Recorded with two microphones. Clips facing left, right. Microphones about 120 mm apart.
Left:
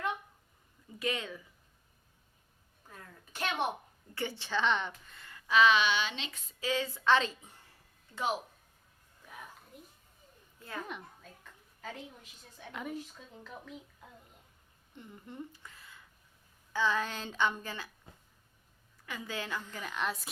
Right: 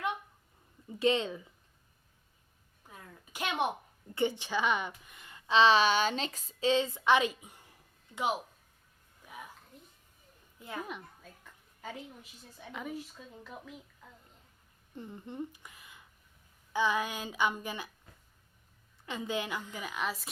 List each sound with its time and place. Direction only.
0.9 s speech: 25° right (ahead or behind)
2.9 s a woman's voice: 15° right (ahead or behind)
9.2 s a sound: 10° right (ahead or behind)
10.6 s a woman's voice: 15° right (ahead or behind)
10.8 s a woman's voice: 5° right (ahead or behind)
14.9 s speech: 30° right (ahead or behind)
15.3 s a sound: 15° right (ahead or behind)
16.7 s a woman's voice: 15° right (ahead or behind)
19.0 s a woman's voice: 20° right (ahead or behind); by 20.2 s 5° right (ahead or behind)